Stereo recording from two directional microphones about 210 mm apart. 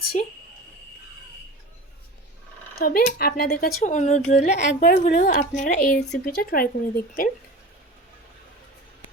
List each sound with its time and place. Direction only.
0.1 s a woman's voice: 35° left (ahead or behind)
2.7 s speech: 45° left (ahead or behind)
3.8 s a woman's voice: 35° left (ahead or behind)